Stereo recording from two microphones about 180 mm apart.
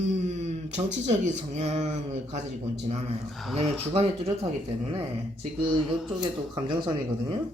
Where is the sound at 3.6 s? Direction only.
30° right (ahead or behind).